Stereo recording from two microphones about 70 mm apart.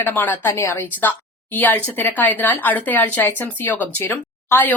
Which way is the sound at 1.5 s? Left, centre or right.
Left.